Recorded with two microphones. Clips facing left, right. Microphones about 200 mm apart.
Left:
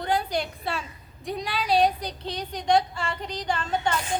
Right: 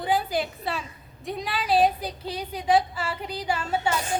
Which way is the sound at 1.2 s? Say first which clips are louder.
Even; centre (ahead or behind).